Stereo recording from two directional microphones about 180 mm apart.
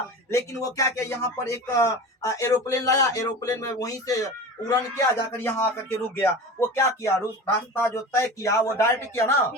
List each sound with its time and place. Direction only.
0.3 s speech: 15° left (ahead or behind)